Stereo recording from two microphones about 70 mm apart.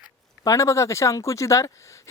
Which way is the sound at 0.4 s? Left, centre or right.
Left.